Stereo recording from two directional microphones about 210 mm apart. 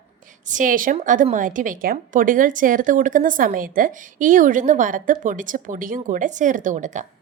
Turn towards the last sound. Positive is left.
turn(degrees=-35)  # may be behind; listen again after turning